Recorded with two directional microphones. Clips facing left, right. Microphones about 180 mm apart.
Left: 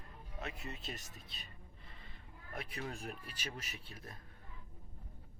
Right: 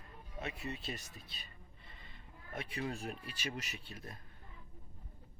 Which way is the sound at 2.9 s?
30° right (ahead or behind).